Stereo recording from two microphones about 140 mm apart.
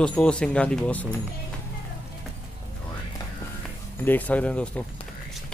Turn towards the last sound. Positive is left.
turn(degrees=10)  # may be behind; listen again after turning